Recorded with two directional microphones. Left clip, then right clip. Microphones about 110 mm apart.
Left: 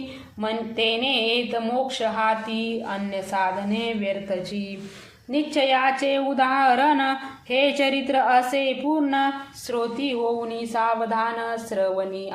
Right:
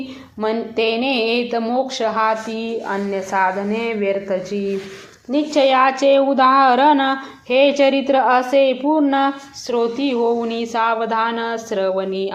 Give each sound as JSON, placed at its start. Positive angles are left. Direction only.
{"t": 0.4, "sound": "a woman's voice", "side_deg": -35}